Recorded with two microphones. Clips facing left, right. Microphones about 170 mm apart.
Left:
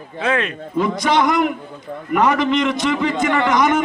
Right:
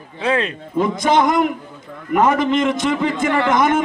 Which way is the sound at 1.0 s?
50° right (ahead or behind).